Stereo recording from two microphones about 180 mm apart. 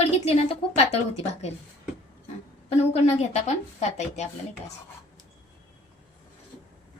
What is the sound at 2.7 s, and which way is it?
Speech, 35° left (ahead or behind).